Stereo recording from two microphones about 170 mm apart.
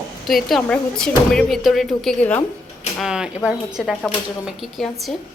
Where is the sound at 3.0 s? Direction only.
5° right (ahead or behind).